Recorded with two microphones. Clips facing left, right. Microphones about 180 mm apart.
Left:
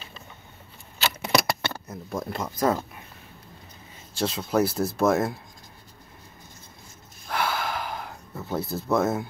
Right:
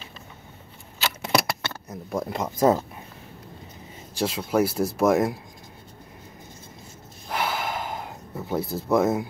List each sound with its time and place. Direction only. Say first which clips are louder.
1.3 s a sound: even; centre (ahead or behind)
1.9 s speech: right 7 dB; 15° right (ahead or behind)
4.1 s speech: right 1 dB; 10° right (ahead or behind)
7.2 s gasp: even; 20° right (ahead or behind)